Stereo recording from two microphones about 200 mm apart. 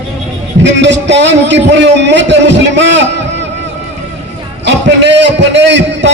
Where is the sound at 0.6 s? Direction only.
65° right (ahead or behind).